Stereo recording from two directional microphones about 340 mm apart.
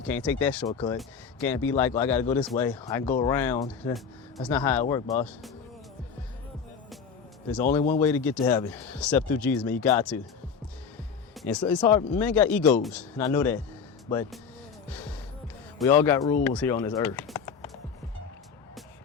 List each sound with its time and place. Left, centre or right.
0.0 s speech: centre
7.5 s speech: centre
11.3 s speech: centre
14.8 s gasp: centre
15.8 s speech: centre